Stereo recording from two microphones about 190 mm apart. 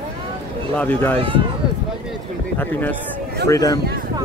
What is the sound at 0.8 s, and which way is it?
Speech, 10° left (ahead or behind).